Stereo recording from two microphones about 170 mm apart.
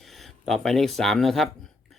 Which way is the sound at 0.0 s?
Centre (ahead or behind).